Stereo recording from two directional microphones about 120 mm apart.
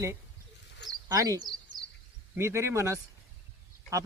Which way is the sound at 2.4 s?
25° right (ahead or behind).